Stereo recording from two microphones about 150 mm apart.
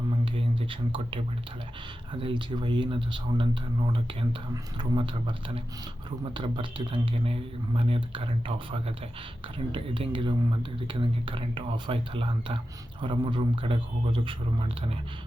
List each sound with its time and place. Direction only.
0.3 s speech: 35° right (ahead or behind)